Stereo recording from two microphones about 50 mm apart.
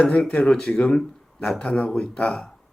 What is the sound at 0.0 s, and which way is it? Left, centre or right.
Speech, left.